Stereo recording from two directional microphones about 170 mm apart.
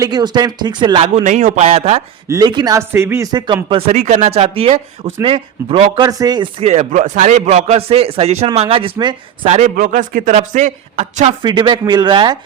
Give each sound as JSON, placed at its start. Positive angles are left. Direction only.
{"t": 0.0, "sound": "speech", "side_deg": -25}
{"t": 1.1, "sound": "speech", "side_deg": -45}
{"t": 2.2, "sound": "speech", "side_deg": -20}
{"t": 3.9, "sound": "speech", "side_deg": -45}
{"t": 6.1, "sound": "speech", "side_deg": -20}
{"t": 6.6, "sound": "speech", "side_deg": -40}
{"t": 9.7, "sound": "speech", "side_deg": -55}
{"t": 11.4, "sound": "speech", "side_deg": -25}